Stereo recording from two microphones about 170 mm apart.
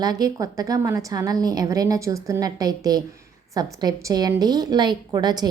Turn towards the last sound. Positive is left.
turn(degrees=-25)  # may be behind; listen again after turning